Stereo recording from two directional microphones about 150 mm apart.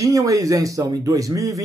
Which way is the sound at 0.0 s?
20° right (ahead or behind).